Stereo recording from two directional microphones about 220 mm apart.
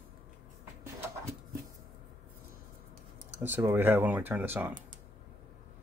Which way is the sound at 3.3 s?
10° right (ahead or behind).